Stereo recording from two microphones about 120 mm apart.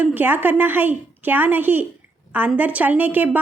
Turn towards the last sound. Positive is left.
turn(degrees=-15)  # may be behind; listen again after turning